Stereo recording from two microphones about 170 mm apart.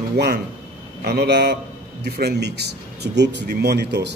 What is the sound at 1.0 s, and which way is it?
Speech, 75° right (ahead or behind).